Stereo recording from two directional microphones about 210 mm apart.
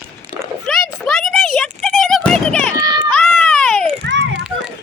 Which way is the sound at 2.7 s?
15° right (ahead or behind).